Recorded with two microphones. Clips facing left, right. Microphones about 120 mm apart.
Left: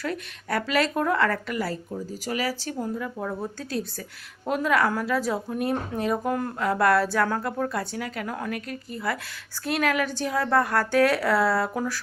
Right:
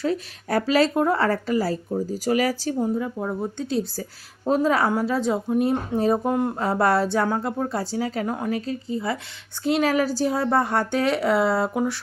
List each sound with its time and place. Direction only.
0.4 s speech: 35° right (ahead or behind)
2.8 s a woman's voice: 20° right (ahead or behind)
6.0 s a woman's voice: 35° right (ahead or behind)